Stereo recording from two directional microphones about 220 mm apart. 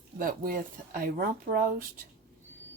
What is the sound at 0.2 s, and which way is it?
A woman's voice, 40° right (ahead or behind).